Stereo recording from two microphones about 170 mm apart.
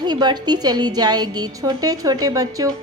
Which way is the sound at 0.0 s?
25° right (ahead or behind).